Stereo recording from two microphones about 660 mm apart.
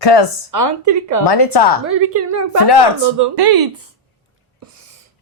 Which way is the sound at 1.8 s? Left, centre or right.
Centre.